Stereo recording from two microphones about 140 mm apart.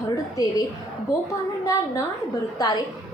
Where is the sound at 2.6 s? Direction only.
25° left (ahead or behind).